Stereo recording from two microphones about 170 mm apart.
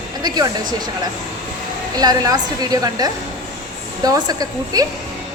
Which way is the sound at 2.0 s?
25° right (ahead or behind).